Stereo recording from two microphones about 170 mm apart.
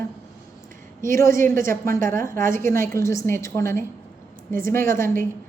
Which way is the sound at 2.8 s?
15° left (ahead or behind).